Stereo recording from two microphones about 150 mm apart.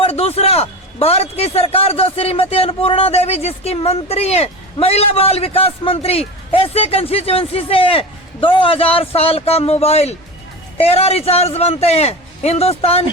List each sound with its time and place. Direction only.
0.0 s a man's voice: 40° left (ahead or behind)